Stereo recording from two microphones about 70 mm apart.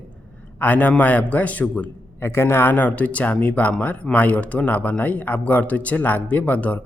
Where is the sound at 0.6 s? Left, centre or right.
Left.